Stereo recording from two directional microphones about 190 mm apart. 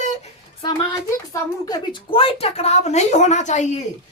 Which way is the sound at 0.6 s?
20° left (ahead or behind).